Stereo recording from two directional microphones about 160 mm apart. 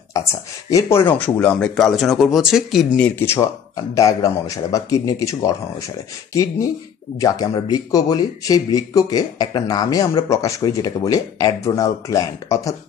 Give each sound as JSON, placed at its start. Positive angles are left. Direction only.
{"t": 0.7, "sound": "speech", "side_deg": 20}
{"t": 3.0, "sound": "speech", "side_deg": 15}
{"t": 7.2, "sound": "speech", "side_deg": 25}